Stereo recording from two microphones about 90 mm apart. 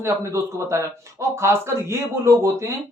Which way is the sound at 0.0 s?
30° right (ahead or behind).